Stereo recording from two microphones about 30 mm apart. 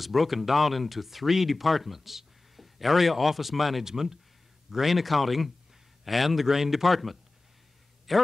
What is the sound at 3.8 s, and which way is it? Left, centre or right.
Speech, centre.